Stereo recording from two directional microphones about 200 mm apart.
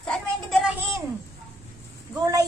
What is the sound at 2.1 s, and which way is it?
Speech, 15° right (ahead or behind).